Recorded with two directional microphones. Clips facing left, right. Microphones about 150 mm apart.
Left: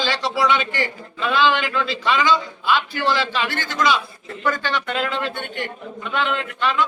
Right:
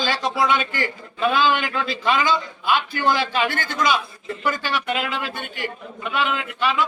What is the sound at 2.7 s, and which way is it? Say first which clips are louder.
A man's voice: even; 15° right (ahead or behind).